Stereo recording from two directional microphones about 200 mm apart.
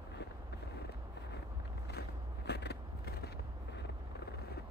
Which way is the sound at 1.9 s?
55° left (ahead or behind).